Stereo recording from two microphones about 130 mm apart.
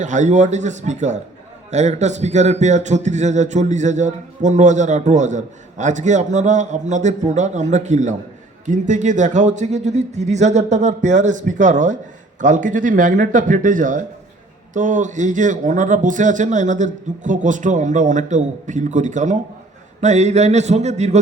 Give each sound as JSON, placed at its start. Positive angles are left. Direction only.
{"t": 0.0, "sound": "a man's voice", "side_deg": -70}
{"t": 12.4, "sound": "a man's voice", "side_deg": -85}